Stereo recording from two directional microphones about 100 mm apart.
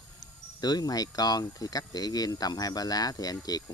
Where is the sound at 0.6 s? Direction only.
40° left (ahead or behind).